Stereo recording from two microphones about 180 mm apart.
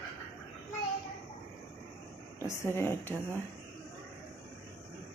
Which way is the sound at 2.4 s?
15° left (ahead or behind).